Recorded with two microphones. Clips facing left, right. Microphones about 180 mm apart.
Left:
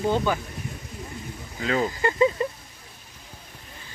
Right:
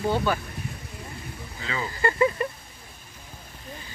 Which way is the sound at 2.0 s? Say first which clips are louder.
Right 1 dB; 15° left (ahead or behind).